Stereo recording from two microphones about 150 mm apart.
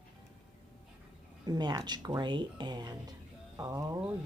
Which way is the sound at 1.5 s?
25° right (ahead or behind).